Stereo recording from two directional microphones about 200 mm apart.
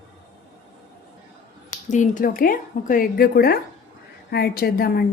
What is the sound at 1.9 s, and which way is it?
A woman's voice, 40° left (ahead or behind).